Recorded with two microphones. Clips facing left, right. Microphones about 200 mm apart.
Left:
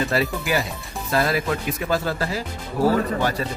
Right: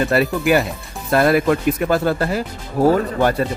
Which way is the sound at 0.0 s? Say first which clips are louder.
Right 6 dB; 55° right (ahead or behind).